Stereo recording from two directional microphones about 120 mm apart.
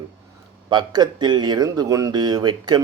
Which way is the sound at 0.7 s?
35° right (ahead or behind).